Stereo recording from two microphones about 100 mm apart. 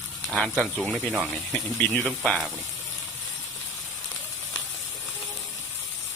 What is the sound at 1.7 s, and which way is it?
Speech, 15° left (ahead or behind).